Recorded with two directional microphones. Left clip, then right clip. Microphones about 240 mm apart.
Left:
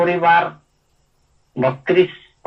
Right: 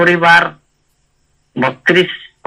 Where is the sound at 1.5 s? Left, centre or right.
Right.